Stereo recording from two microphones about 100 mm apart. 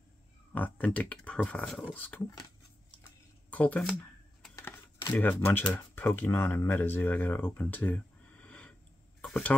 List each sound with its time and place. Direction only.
0.5 s speech: 15° left (ahead or behind)
3.4 s speech: 15° left (ahead or behind)
5.1 s speech: 20° left (ahead or behind)
7.6 s a sound: 20° left (ahead or behind)
9.3 s speech: 15° left (ahead or behind)